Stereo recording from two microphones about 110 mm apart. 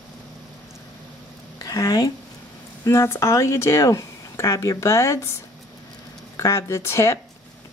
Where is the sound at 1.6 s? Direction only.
35° left (ahead or behind).